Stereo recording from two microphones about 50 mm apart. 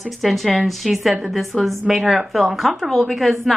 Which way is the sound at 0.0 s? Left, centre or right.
Centre.